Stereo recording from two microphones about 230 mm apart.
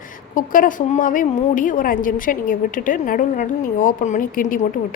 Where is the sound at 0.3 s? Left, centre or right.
Left.